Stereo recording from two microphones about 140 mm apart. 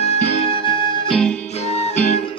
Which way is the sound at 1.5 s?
50° left (ahead or behind).